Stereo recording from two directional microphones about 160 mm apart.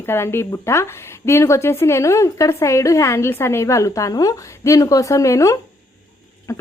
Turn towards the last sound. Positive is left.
turn(degrees=15)  # may be behind; listen again after turning